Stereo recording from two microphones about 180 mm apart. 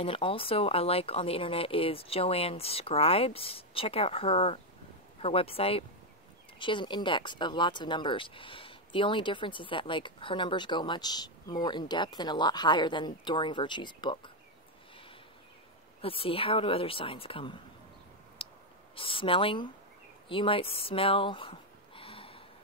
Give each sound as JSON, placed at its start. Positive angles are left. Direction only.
{"t": 0.0, "sound": "speech", "side_deg": 30}
{"t": 16.0, "sound": "speech", "side_deg": 30}
{"t": 18.4, "sound": "a sound", "side_deg": 30}
{"t": 18.9, "sound": "speech", "side_deg": 30}